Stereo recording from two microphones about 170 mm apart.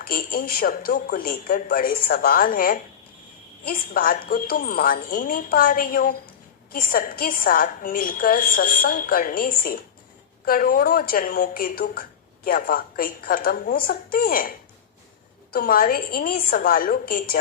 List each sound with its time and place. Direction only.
0.0 s a woman's voice: 60° left (ahead or behind)
15.5 s a woman's voice: 55° left (ahead or behind)